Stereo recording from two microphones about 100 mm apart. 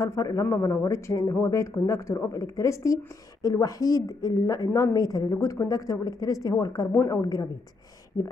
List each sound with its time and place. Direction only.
0.0 s a woman's voice: 30° left (ahead or behind)